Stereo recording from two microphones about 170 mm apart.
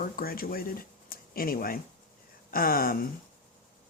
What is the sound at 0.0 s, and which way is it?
Speech, 60° left (ahead or behind).